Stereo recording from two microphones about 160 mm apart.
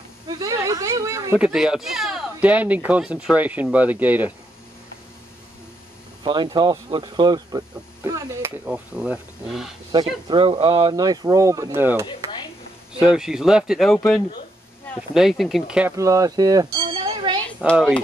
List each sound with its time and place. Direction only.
0.3 s speech: 20° right (ahead or behind)
1.4 s speech: 5° right (ahead or behind)
6.2 s speech: 30° right (ahead or behind); by 9.8 s centre (ahead or behind)
10.2 s speech: 30° right (ahead or behind)
12.1 s a sound: 30° left (ahead or behind)
13.0 s speech: 5° right (ahead or behind)
16.0 s speech: 20° right (ahead or behind)
16.8 s a sound: 30° right (ahead or behind)
17.6 s speech: 5° right (ahead or behind)